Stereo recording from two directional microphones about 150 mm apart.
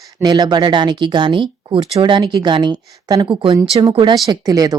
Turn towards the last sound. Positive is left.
turn(degrees=-25)  # may be behind; listen again after turning